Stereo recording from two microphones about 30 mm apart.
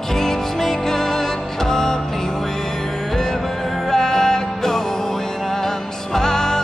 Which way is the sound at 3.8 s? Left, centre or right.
Centre.